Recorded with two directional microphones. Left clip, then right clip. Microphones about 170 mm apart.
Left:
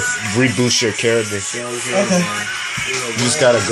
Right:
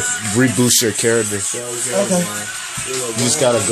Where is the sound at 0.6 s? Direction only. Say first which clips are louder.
Even; 30° right (ahead or behind).